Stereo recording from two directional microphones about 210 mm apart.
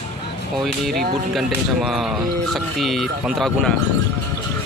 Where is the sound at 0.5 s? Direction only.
Centre (ahead or behind).